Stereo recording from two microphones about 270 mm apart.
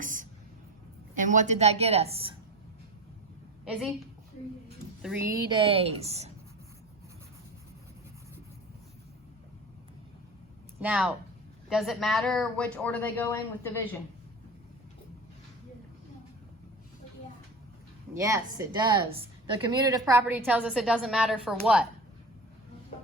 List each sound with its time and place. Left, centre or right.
0.0 s a sound: right
1.1 s a woman's voice: right
5.0 s a woman's voice: centre
5.5 s a woman's voice: centre
10.8 s speech: centre
18.1 s a woman's voice: centre